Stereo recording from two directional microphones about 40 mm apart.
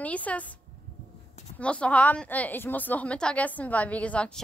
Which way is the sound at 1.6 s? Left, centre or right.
Left.